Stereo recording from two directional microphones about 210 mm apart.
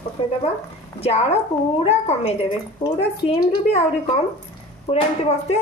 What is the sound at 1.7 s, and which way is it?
A woman's voice, 30° left (ahead or behind).